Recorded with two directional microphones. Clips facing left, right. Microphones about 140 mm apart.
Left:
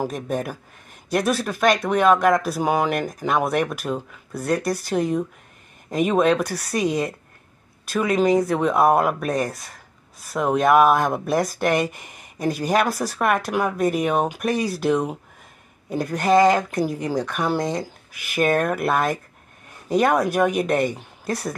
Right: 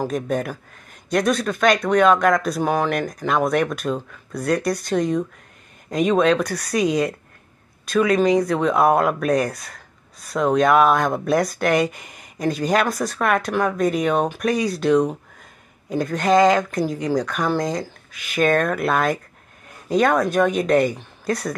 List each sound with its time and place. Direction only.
0.0 s speech: 5° left (ahead or behind)